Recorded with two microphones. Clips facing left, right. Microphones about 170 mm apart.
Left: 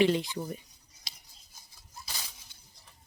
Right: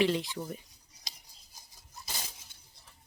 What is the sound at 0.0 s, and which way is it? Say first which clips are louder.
Speech: left 3 dB; centre (ahead or behind).